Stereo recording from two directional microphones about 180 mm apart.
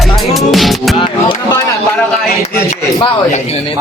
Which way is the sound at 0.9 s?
25° left (ahead or behind).